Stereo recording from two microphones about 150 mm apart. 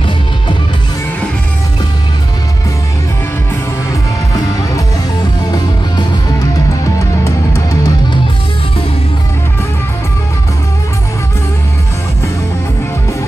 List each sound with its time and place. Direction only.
6.8 s music: 20° left (ahead or behind)